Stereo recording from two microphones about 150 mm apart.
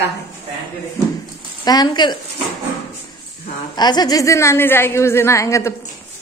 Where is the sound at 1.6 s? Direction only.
25° left (ahead or behind).